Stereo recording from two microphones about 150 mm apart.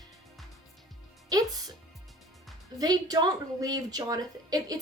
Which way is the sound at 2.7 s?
25° right (ahead or behind).